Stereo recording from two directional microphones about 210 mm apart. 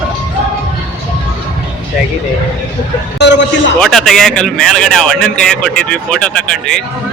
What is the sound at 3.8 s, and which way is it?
Speech, centre (ahead or behind).